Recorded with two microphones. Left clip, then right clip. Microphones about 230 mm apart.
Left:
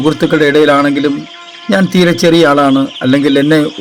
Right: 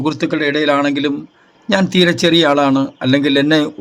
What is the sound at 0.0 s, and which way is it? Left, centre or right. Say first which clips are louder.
A man's voice: left 7 dB; left.